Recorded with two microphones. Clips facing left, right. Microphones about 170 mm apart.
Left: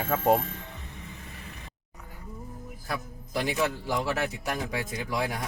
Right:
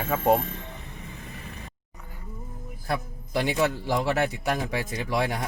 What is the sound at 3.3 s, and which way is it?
A man's voice, 70° right (ahead or behind).